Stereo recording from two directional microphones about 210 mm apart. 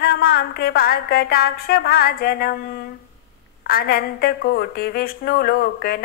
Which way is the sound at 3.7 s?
45° left (ahead or behind).